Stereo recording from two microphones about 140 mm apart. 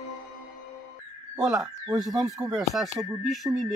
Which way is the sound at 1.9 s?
Centre (ahead or behind).